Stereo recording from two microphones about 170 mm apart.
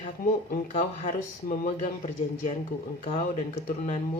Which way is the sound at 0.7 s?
45° left (ahead or behind).